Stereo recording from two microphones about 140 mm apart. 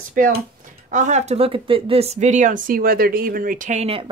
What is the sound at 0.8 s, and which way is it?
A woman's voice, 60° right (ahead or behind).